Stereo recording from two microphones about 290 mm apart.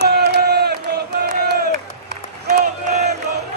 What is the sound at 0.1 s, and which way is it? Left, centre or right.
Crowd, right.